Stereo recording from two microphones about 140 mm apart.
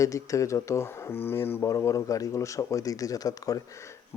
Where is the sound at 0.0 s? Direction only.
25° left (ahead or behind).